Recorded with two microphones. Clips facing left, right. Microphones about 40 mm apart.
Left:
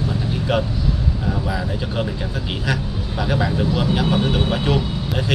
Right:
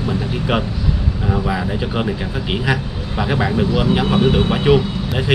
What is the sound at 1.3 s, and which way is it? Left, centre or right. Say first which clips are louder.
Speech: right 4 dB; right.